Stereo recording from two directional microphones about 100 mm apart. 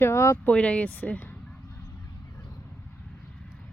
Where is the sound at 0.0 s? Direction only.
30° left (ahead or behind).